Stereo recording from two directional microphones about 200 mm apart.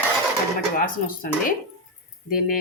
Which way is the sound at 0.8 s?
45° left (ahead or behind).